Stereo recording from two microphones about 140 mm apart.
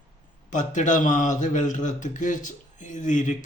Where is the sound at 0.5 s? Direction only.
60° left (ahead or behind).